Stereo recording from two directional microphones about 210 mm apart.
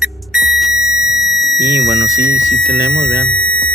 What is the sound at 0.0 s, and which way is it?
Music, centre (ahead or behind).